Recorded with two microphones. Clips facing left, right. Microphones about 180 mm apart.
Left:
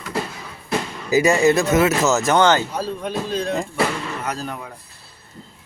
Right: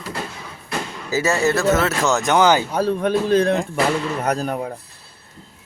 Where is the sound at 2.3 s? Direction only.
10° right (ahead or behind).